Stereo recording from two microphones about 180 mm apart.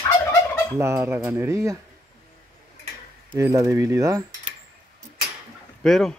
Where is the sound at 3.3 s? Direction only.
15° right (ahead or behind).